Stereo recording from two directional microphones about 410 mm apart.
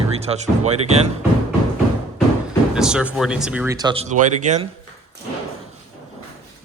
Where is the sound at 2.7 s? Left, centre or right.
Centre.